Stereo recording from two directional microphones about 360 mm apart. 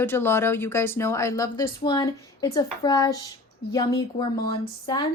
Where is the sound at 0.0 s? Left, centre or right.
Centre.